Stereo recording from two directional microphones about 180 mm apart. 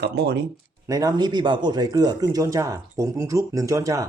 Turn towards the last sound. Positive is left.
turn(degrees=-15)  # may be behind; listen again after turning